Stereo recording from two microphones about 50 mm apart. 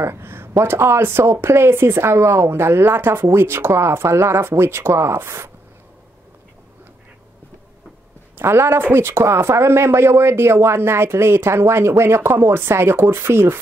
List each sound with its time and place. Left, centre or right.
0.0 s speech: right
8.4 s speech: right